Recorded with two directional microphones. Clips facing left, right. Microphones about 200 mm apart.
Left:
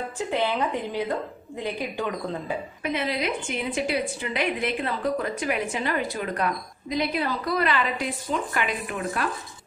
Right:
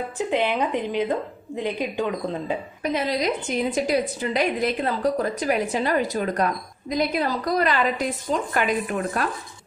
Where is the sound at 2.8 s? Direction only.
40° right (ahead or behind).